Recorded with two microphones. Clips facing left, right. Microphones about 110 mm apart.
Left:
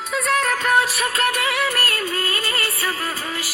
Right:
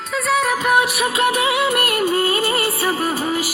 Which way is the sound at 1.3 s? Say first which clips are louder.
Right 4 dB; 20° right (ahead or behind).